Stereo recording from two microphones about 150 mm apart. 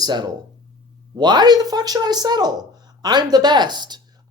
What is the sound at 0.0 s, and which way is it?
Speech, 30° right (ahead or behind).